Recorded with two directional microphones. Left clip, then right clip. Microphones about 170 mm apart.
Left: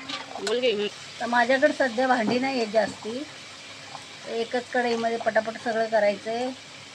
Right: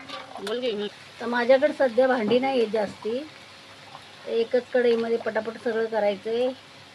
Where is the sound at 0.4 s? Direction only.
5° right (ahead or behind).